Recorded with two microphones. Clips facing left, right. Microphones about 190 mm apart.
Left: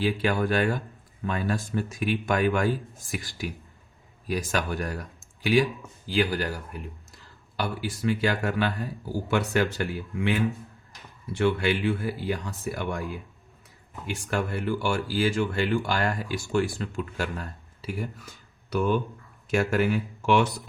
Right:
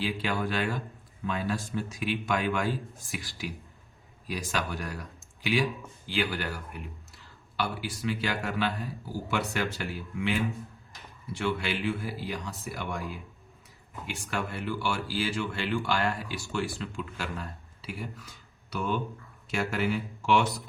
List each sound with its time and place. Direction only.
0.0 s speech: 50° left (ahead or behind)
7.5 s speech: 45° left (ahead or behind)
14.1 s speech: 45° left (ahead or behind)